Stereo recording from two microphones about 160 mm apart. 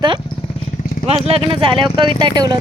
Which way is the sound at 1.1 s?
40° right (ahead or behind).